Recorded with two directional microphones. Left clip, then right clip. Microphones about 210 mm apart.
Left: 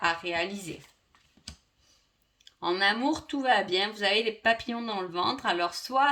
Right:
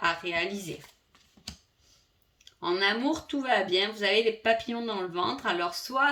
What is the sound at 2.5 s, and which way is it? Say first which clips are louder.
Speech: left 1 dB; 35° left (ahead or behind).